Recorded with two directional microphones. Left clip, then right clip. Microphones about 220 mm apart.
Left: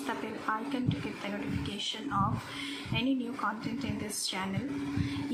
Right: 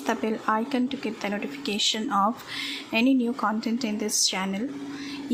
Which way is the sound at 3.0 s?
50° right (ahead or behind).